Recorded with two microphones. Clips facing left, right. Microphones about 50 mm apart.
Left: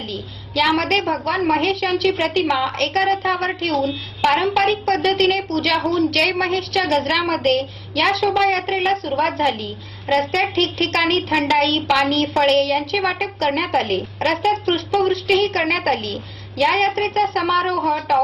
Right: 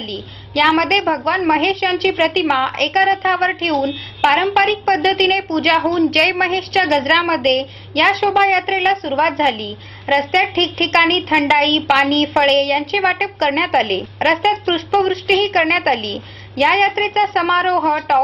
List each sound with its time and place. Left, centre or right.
0.1 s a woman's voice: right
17.7 s speech: right